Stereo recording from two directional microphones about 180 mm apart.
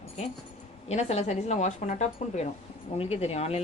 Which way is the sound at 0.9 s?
35° left (ahead or behind).